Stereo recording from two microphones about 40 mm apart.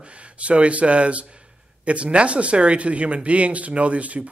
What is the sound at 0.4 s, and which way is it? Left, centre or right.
Speech, right.